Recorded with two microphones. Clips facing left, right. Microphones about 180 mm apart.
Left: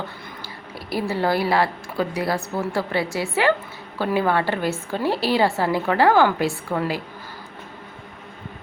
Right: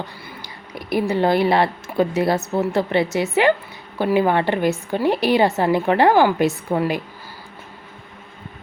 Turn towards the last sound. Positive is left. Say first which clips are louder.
# right 4 dB
turn(degrees=-15)  # may be behind; listen again after turning